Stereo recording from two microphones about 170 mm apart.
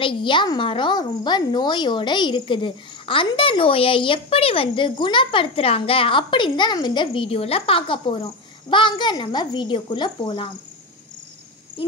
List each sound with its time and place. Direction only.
0.0 s speech: 30° left (ahead or behind)